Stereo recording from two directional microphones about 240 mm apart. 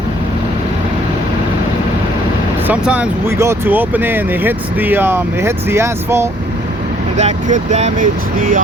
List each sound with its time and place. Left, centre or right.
2.6 s speech: centre
7.2 s speech: right